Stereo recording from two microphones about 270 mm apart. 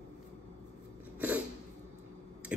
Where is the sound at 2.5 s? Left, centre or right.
Centre.